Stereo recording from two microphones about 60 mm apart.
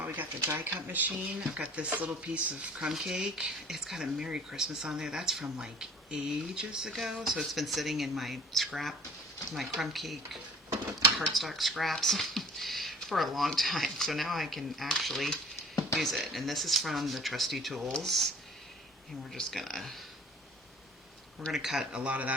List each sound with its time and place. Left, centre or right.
0.6 s speech: right
1.4 s speech: centre
2.9 s speech: centre
17.8 s speech: centre
19.4 s speech: centre
21.5 s speech: centre
21.9 s speech: right